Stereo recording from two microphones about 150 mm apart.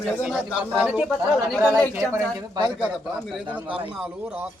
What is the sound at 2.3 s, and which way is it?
Speech, 25° right (ahead or behind).